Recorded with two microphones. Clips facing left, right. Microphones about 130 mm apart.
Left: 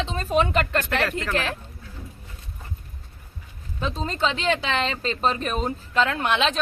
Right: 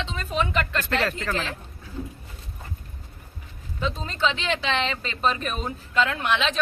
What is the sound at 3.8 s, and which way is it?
A woman's voice, 40° left (ahead or behind).